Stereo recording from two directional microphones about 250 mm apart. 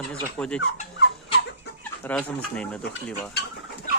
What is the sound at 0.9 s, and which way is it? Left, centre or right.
Fowl, left.